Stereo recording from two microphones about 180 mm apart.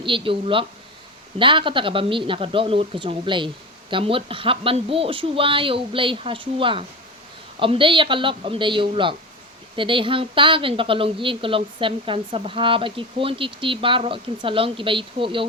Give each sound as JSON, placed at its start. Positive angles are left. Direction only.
{"t": 0.0, "sound": "speech", "side_deg": -30}